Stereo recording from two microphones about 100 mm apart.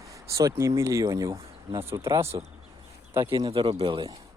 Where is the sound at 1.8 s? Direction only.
25° right (ahead or behind).